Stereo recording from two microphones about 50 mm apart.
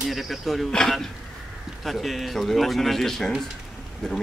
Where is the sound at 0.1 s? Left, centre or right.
Centre.